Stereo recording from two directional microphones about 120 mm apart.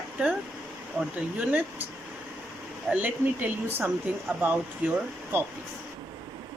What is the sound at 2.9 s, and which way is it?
Speech, 10° right (ahead or behind).